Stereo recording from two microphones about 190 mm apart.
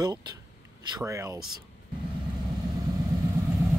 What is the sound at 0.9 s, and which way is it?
Speech, 15° right (ahead or behind).